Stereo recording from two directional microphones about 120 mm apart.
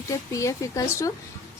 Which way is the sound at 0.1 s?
25° left (ahead or behind).